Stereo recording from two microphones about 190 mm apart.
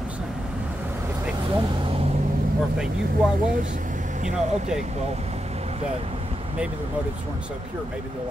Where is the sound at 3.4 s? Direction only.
45° right (ahead or behind).